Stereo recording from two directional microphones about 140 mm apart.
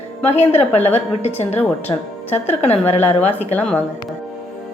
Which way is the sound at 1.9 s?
25° left (ahead or behind).